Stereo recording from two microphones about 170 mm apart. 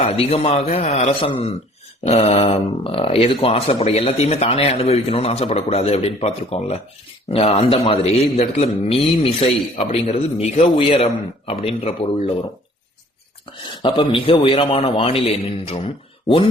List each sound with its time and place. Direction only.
0.0 s speech: 35° left (ahead or behind)
13.8 s speech: 30° left (ahead or behind)